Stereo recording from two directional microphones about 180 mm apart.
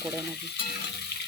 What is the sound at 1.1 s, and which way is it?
Water, 65° left (ahead or behind).